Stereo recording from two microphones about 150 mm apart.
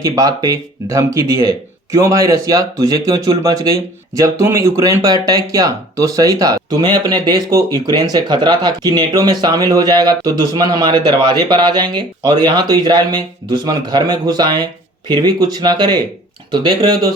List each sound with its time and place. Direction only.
0.0 s speech: 25° right (ahead or behind)